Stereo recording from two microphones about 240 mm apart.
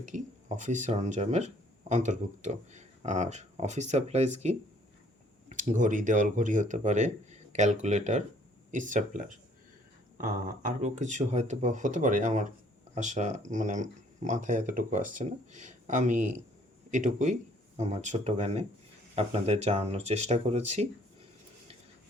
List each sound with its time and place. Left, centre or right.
0.0 s speech: right